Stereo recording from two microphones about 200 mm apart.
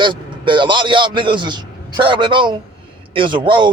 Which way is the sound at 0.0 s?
25° right (ahead or behind).